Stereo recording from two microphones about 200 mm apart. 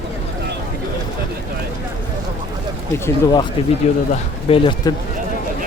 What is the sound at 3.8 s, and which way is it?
A man's voice, 35° left (ahead or behind).